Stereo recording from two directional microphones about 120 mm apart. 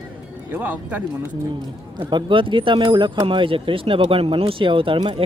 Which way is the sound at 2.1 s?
45° right (ahead or behind).